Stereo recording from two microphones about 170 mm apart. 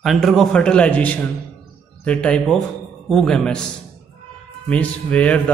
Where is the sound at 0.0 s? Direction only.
Centre (ahead or behind).